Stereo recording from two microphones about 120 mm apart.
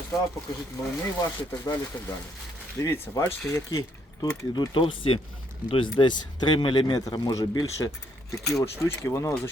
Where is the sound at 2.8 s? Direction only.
25° left (ahead or behind).